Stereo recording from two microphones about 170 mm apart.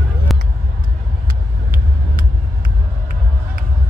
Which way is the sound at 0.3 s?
Centre (ahead or behind).